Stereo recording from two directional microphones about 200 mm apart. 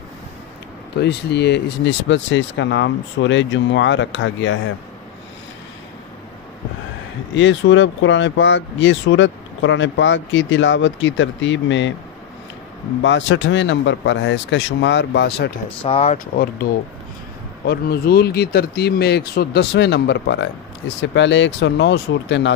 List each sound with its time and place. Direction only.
1.0 s speech: 55° left (ahead or behind)
7.3 s speech: 65° left (ahead or behind)
13.0 s speech: 65° left (ahead or behind)
15.8 s speech: 30° left (ahead or behind)
17.6 s speech: 50° left (ahead or behind)